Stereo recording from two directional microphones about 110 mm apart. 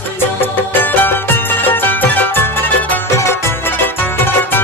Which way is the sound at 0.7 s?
15° left (ahead or behind).